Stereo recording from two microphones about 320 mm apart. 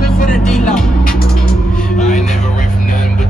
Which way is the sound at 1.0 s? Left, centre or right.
Left.